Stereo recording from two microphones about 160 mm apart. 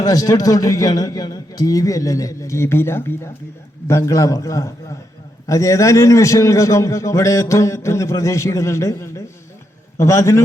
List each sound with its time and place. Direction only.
0.0 s a man's voice: 20° left (ahead or behind)